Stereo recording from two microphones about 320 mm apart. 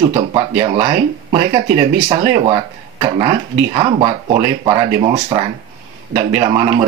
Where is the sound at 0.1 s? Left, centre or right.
Centre.